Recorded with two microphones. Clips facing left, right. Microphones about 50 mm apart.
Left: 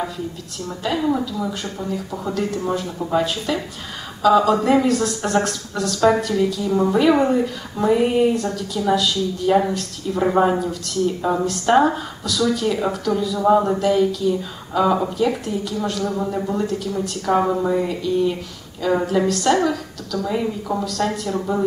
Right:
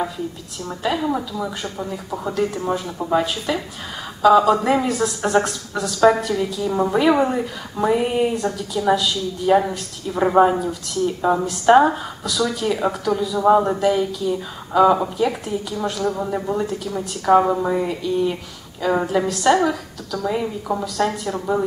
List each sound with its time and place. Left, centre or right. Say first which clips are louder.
0.7 s speech: left 1 dB; centre